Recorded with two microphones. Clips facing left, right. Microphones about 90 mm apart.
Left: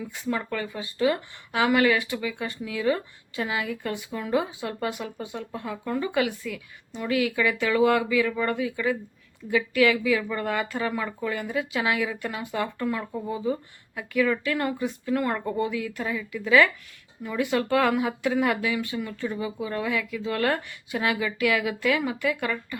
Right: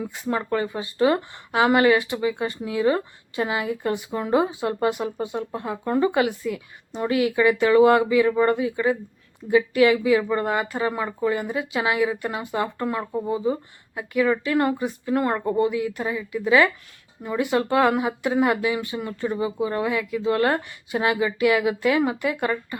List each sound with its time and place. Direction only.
0.1 s speech: 30° right (ahead or behind)